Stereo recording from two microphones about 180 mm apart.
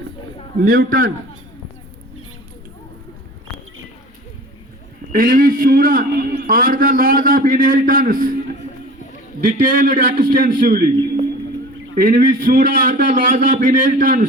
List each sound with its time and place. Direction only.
0.6 s a man's voice: 50° right (ahead or behind)
5.1 s a man's voice: 50° right (ahead or behind)
9.5 s a man's voice: 45° right (ahead or behind)
11.9 s a man's voice: 50° right (ahead or behind)